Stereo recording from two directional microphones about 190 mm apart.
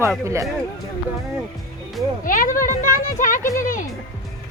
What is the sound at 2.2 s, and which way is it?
Speech, 45° left (ahead or behind).